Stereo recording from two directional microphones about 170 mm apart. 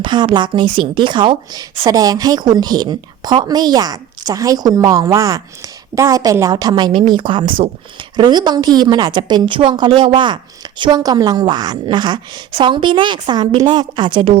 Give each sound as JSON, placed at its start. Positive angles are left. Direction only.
{"t": 0.0, "sound": "a woman's voice", "side_deg": -30}